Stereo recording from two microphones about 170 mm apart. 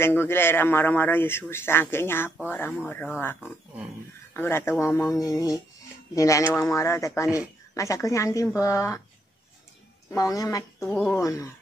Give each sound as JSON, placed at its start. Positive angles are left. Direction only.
{"t": 0.0, "sound": "a man's voice", "side_deg": 15}
{"t": 10.1, "sound": "speech", "side_deg": 20}
{"t": 10.9, "sound": "speech", "side_deg": 5}
{"t": 11.1, "sound": "speech", "side_deg": 20}